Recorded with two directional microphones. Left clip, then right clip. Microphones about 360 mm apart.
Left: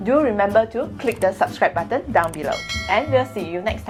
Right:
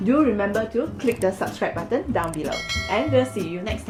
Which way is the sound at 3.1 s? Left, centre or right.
Left.